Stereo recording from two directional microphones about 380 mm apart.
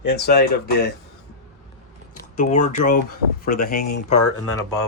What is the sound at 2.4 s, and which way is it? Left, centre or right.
Speech, centre.